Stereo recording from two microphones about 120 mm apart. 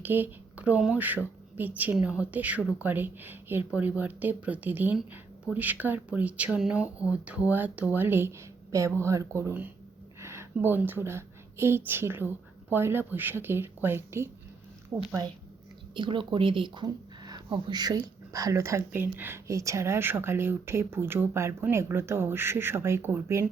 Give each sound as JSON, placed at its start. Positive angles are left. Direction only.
{"t": 0.0, "sound": "speech", "side_deg": -15}
{"t": 10.2, "sound": "a sound", "side_deg": -20}
{"t": 11.9, "sound": "a woman's voice", "side_deg": -20}
{"t": 14.9, "sound": "a woman's voice", "side_deg": -30}
{"t": 16.0, "sound": "a woman's voice", "side_deg": -45}